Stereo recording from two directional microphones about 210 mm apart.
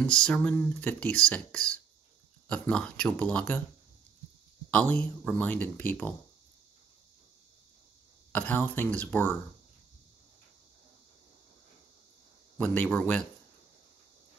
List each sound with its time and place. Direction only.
0.0 s speech: 5° left (ahead or behind)
4.6 s speech: 5° left (ahead or behind)
8.3 s speech: 10° left (ahead or behind)
12.5 s speech: 5° left (ahead or behind)